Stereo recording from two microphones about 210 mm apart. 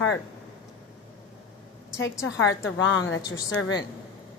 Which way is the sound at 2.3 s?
70° left (ahead or behind).